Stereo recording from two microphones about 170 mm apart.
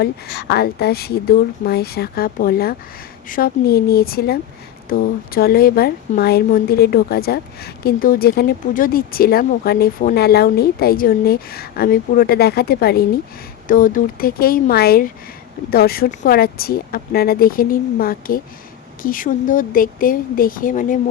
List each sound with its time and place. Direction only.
0.0 s a woman's voice: 70° left (ahead or behind)
13.7 s a woman's voice: 55° left (ahead or behind)